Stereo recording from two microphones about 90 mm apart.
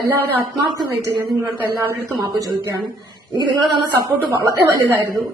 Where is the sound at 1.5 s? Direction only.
25° right (ahead or behind).